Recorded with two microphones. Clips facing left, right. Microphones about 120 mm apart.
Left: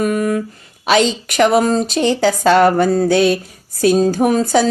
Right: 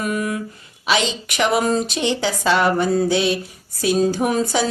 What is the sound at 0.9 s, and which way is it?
Speech, 45° left (ahead or behind).